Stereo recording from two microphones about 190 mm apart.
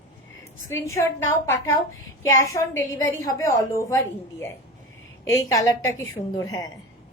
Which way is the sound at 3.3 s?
15° left (ahead or behind).